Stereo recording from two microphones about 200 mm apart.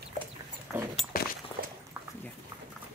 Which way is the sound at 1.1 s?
45° left (ahead or behind).